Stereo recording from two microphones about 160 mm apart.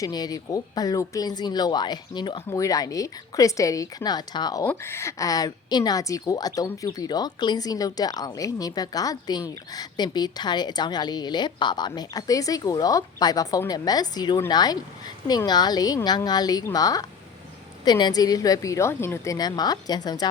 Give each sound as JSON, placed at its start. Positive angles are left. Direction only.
{"t": 0.0, "sound": "a woman's voice", "side_deg": 25}